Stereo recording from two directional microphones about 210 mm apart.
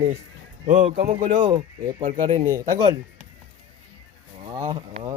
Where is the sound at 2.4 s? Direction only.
15° right (ahead or behind).